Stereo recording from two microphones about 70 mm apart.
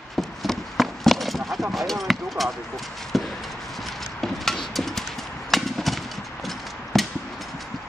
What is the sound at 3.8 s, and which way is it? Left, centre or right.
Clip-clop, centre.